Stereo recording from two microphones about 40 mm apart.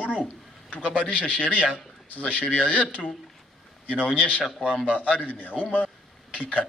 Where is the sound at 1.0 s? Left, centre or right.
Left.